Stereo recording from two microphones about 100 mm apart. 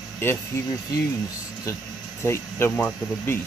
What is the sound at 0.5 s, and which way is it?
Speech, 25° left (ahead or behind).